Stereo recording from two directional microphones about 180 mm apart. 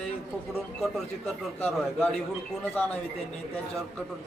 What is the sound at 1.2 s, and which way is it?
Speech, 5° left (ahead or behind).